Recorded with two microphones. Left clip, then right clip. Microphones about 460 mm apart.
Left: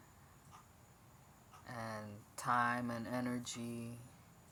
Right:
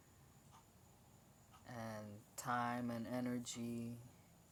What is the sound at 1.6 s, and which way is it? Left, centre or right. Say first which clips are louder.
Speech: left 4 dB; right.